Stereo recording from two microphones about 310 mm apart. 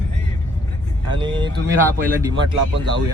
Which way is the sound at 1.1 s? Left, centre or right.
Centre.